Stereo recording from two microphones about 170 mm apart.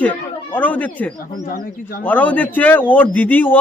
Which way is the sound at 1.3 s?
60° left (ahead or behind).